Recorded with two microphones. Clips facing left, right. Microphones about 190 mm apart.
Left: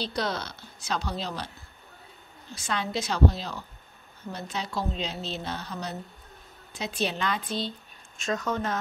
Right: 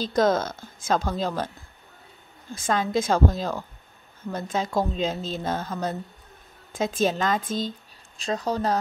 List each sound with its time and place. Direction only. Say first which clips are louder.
0.0 s a woman's voice: right 9 dB; 45° right (ahead or behind)
2.5 s a woman's voice: right 6 dB; 50° right (ahead or behind)
8.2 s speech: right 3 dB; 30° right (ahead or behind)